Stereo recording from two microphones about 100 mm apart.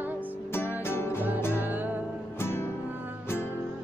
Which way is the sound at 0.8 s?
25° left (ahead or behind).